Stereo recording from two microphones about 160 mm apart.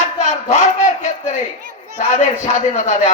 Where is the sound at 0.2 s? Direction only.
45° left (ahead or behind).